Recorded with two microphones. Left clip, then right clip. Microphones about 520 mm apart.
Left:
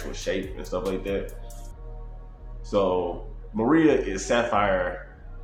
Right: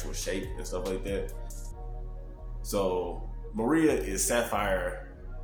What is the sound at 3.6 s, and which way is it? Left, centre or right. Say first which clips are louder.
Speech: left 5 dB; right.